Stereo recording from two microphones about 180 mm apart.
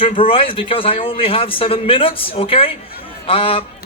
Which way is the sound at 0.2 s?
30° left (ahead or behind).